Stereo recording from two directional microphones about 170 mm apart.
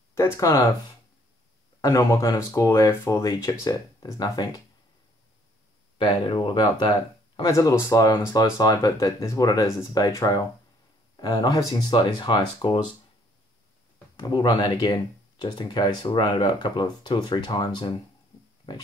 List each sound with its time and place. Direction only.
0.1 s speech: 20° left (ahead or behind)
1.8 s speech: 20° left (ahead or behind)
5.9 s speech: 30° left (ahead or behind)
14.2 s speech: 25° left (ahead or behind)